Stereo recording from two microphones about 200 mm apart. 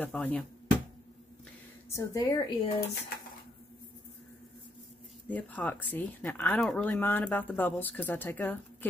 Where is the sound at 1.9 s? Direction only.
15° left (ahead or behind).